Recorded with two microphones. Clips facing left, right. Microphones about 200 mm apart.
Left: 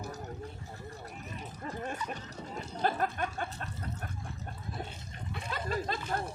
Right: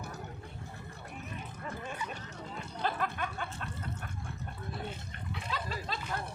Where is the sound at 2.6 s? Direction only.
45° left (ahead or behind).